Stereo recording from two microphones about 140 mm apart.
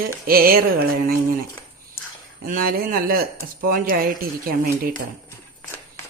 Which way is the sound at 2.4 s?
90° right.